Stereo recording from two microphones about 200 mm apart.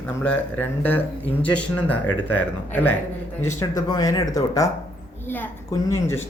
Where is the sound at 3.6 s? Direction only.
20° left (ahead or behind).